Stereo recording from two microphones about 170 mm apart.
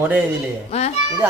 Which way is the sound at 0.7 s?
35° left (ahead or behind).